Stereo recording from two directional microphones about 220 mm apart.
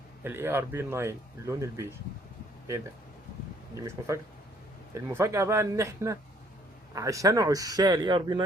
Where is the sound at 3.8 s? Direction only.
15° right (ahead or behind).